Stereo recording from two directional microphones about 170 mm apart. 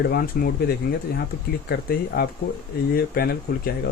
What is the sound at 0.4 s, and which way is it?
Speech, 60° left (ahead or behind).